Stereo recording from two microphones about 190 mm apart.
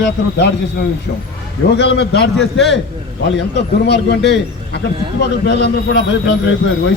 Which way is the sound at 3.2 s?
65° left (ahead or behind).